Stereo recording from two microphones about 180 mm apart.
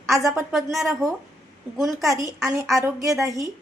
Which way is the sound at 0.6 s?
Centre (ahead or behind).